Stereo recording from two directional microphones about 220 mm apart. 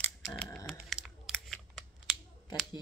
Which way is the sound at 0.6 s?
Centre (ahead or behind).